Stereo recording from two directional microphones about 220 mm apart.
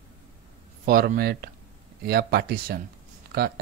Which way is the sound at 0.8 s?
40° right (ahead or behind).